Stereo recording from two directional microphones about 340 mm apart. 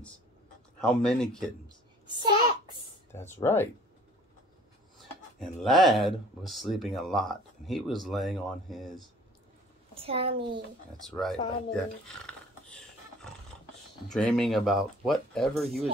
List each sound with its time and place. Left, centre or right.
0.7 s speech: centre
3.1 s speech: centre
5.6 s speech: centre
9.9 s a child's voice: centre
11.1 s speech: centre
14.0 s speech: centre